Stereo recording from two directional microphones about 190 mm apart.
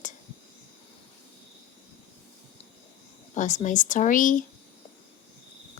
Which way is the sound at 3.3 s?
40° left (ahead or behind).